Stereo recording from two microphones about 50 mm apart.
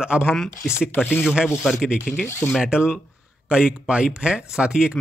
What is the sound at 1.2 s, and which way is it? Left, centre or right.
Speech, centre.